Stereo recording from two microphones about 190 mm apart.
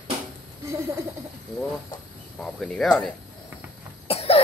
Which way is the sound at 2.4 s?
5° left (ahead or behind).